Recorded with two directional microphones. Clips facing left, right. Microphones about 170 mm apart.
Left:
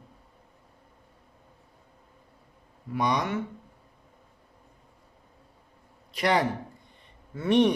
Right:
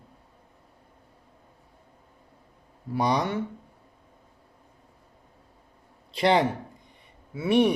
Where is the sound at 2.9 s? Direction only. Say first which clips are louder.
Right 2 dB; 30° right (ahead or behind).